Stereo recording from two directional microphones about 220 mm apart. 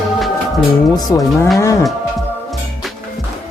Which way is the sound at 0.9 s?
15° left (ahead or behind).